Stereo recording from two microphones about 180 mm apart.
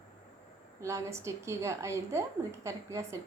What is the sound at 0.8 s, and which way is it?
A woman's voice, 15° right (ahead or behind).